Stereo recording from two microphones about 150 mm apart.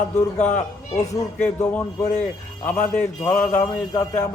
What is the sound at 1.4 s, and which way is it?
A man's voice, 10° left (ahead or behind).